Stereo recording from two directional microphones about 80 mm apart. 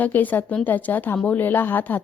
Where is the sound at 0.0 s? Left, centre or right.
Left.